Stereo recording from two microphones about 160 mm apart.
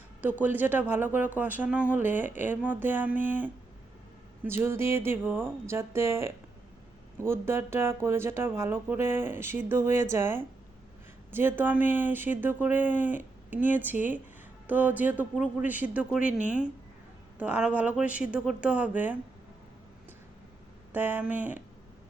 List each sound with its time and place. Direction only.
0.2 s speech: 10° right (ahead or behind)
20.9 s speech: 10° right (ahead or behind)